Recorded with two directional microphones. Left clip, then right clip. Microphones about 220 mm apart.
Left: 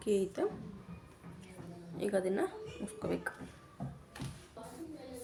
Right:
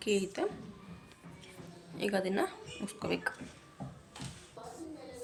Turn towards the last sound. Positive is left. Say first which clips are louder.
# right 3 dB
turn(degrees=0)  # may be behind; listen again after turning